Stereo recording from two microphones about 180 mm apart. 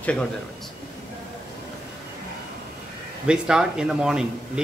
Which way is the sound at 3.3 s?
5° right (ahead or behind).